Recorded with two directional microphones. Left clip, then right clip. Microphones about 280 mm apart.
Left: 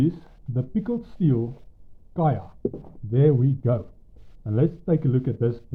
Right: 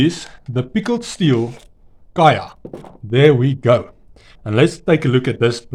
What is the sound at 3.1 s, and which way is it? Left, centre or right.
Speech, centre.